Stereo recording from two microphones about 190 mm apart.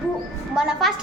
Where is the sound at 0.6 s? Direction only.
5° right (ahead or behind).